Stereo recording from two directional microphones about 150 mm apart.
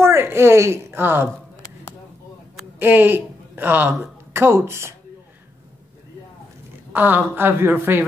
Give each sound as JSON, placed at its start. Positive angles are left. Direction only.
{"t": 0.0, "sound": "a woman's voice", "side_deg": -15}
{"t": 2.8, "sound": "speech", "side_deg": -10}
{"t": 6.9, "sound": "a woman's voice", "side_deg": -10}